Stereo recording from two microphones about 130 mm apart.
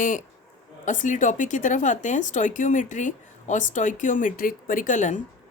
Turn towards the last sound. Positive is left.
turn(degrees=75)  # may be behind; listen again after turning